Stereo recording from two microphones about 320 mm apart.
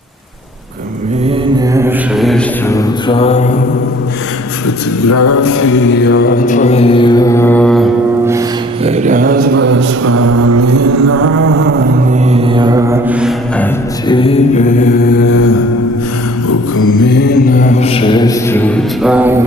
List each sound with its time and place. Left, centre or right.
1.5 s mantra: centre
5.0 s mantra: left; by 11.3 s right
12.3 s mantra: centre
14.1 s music: centre
15.2 s mantra: left
17.1 s mantra: left; by 19.4 s centre